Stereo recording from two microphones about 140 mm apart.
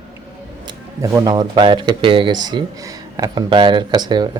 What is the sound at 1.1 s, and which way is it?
Speech, 25° right (ahead or behind).